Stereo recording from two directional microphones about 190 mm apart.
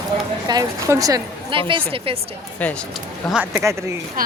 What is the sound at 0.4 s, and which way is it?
A woman's voice, 20° right (ahead or behind).